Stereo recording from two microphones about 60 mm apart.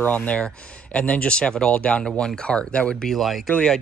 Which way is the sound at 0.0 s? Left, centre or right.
Left.